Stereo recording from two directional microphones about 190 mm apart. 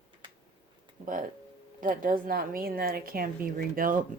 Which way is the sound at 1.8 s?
45° right (ahead or behind).